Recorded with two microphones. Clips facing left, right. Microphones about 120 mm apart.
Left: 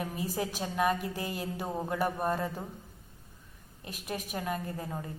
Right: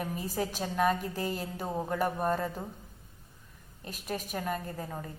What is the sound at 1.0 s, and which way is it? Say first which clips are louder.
Speech: right 2 dB; 40° right (ahead or behind).